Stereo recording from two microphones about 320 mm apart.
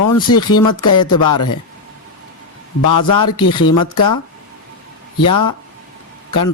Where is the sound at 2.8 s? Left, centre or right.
Left.